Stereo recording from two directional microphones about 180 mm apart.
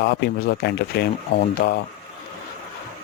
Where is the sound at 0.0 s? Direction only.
65° left (ahead or behind).